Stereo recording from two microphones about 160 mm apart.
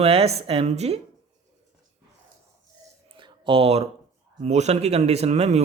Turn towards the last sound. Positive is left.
turn(degrees=-40)  # may be behind; listen again after turning